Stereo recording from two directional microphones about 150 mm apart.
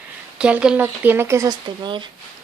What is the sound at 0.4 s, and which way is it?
Speech, 5° right (ahead or behind).